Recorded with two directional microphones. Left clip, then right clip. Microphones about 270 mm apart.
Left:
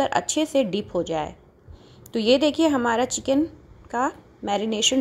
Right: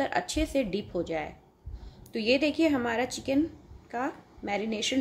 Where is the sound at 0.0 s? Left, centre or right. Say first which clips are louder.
Left 6 dB; centre.